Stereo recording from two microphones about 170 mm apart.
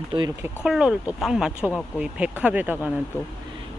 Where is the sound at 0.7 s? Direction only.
5° right (ahead or behind).